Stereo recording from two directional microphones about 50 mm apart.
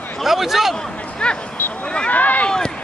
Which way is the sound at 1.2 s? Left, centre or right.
Left.